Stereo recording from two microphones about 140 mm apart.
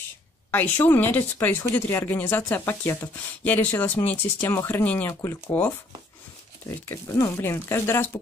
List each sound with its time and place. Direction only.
0.5 s speech: 15° left (ahead or behind)
6.9 s speech: 20° left (ahead or behind)